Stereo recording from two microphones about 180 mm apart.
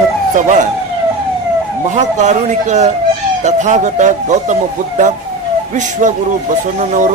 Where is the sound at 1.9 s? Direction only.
40° right (ahead or behind).